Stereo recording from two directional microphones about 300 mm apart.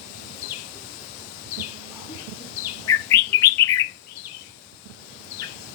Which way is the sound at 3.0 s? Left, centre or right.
Centre.